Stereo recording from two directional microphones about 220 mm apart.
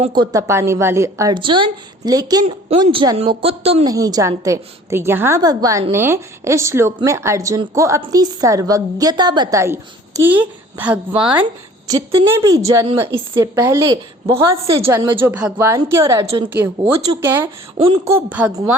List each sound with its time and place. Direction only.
0.0 s a woman's voice: 20° right (ahead or behind)
3.8 s a woman's voice: 15° right (ahead or behind)